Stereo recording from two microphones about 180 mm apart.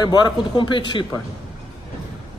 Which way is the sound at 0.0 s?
25° left (ahead or behind).